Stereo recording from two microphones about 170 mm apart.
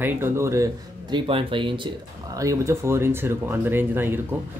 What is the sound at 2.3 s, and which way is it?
Speech, 20° right (ahead or behind).